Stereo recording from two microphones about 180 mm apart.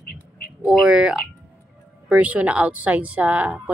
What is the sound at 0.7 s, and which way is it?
Speech, 5° right (ahead or behind).